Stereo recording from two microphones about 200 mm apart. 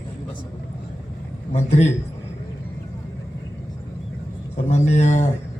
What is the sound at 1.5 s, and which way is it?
Speech, 35° left (ahead or behind).